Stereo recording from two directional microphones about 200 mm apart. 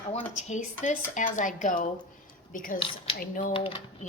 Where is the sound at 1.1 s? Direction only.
40° left (ahead or behind).